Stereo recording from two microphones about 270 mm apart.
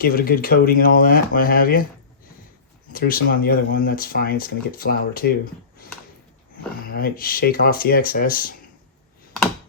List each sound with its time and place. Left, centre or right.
0.0 s speech: left
2.9 s speech: left
6.9 s speech: left